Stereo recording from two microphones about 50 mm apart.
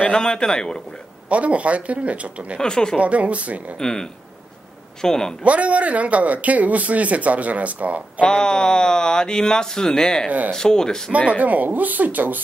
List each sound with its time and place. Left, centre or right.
0.1 s speech: centre
1.3 s speech: right
2.6 s speech: centre
3.0 s speech: right
3.7 s speech: centre
5.4 s speech: right
8.2 s speech: centre
11.1 s speech: right